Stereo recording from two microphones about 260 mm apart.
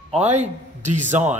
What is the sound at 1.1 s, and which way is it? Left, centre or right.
Speech, centre.